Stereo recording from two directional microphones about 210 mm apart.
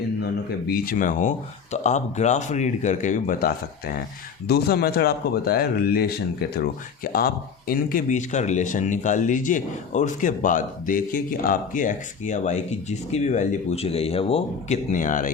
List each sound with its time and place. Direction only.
0.7 s speech: 40° left (ahead or behind)